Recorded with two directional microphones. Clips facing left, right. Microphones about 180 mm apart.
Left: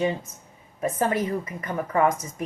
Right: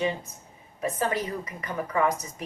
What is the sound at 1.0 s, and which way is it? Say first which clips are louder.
Speech: left 5 dB; 50° left (ahead or behind).